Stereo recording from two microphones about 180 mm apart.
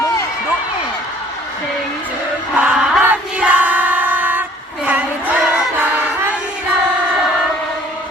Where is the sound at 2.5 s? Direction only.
5° right (ahead or behind).